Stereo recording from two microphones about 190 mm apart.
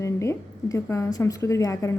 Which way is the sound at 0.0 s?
15° left (ahead or behind).